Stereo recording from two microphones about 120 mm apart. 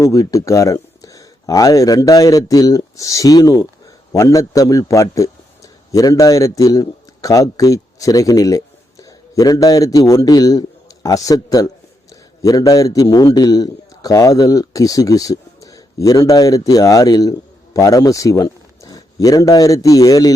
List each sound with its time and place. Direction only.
0.0 s a man's voice: 25° left (ahead or behind)